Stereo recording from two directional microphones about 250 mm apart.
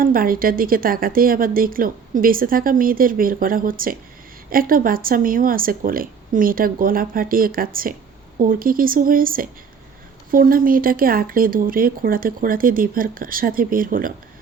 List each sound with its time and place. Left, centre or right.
0.0 s a woman's voice: right